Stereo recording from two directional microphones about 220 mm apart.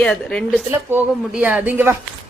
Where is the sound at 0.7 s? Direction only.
10° right (ahead or behind).